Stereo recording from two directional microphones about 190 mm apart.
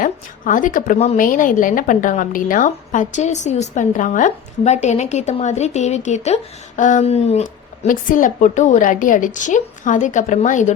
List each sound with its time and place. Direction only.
0.0 s speech: 45° left (ahead or behind)